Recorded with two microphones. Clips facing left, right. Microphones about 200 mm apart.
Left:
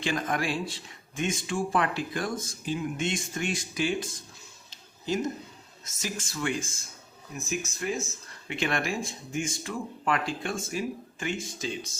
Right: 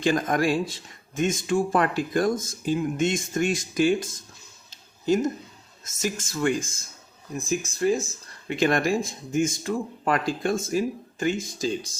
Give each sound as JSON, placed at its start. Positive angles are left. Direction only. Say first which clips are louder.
{"t": 0.0, "sound": "speech", "louder": "right 7 dB", "side_deg": -45}
{"t": 4.7, "sound": "a sound", "louder": "right 7 dB", "side_deg": -45}
{"t": 5.8, "sound": "speech", "louder": "right 6 dB", "side_deg": -45}